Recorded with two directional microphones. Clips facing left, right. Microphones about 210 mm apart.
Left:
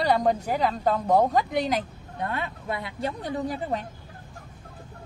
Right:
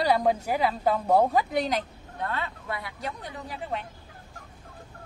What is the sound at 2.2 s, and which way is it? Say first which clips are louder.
Speech: left 2 dB; 15° left (ahead or behind).